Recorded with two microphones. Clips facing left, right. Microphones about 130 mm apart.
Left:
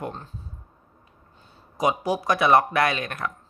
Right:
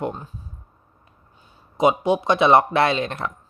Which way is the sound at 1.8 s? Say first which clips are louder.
Right 5 dB; 25° right (ahead or behind).